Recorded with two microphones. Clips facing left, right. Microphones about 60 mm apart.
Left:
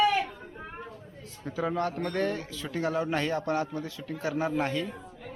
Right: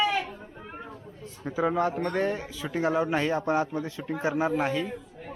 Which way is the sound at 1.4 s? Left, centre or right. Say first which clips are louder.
Right 4 dB; centre.